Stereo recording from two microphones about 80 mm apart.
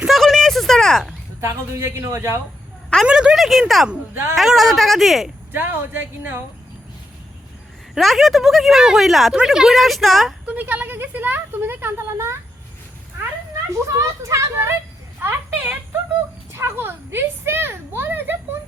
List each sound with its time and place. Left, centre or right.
0.1 s a sound: centre
1.4 s a man's voice: right
3.1 s speech: centre
4.1 s a man's voice: right
4.4 s speech: centre
5.5 s speech: right
7.9 s speech: centre
10.4 s speech: centre; by 12.4 s right
13.8 s a man's voice: right
15.2 s a sound: right
16.5 s speech: right